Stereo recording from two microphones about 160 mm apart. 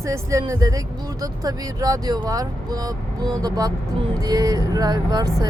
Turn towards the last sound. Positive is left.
turn(degrees=-25)  # may be behind; listen again after turning